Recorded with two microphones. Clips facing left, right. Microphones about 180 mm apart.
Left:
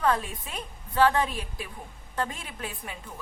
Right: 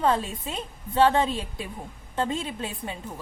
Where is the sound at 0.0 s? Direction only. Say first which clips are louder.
Right 2 dB; 25° right (ahead or behind).